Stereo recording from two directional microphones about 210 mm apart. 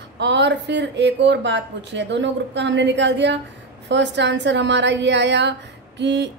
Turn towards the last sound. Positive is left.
turn(degrees=-55)  # may be behind; listen again after turning